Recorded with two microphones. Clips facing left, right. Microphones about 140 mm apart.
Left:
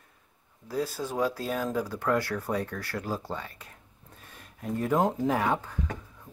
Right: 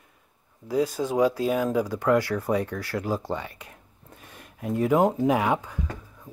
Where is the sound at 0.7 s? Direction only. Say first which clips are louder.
Right 7 dB; 15° right (ahead or behind).